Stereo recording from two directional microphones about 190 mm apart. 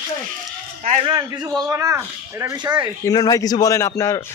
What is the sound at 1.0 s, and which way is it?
A man's voice, 25° right (ahead or behind).